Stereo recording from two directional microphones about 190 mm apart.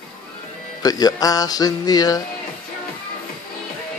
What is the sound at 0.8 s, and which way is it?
Speech, 20° left (ahead or behind).